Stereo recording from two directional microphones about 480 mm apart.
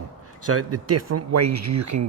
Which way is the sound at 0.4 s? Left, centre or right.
Right.